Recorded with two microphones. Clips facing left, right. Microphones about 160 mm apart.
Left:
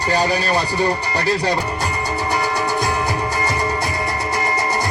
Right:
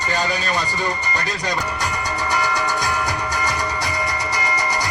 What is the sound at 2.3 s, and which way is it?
Music, 30° left (ahead or behind).